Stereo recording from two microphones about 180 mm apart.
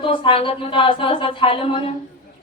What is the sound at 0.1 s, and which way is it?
A woman's voice, 30° left (ahead or behind).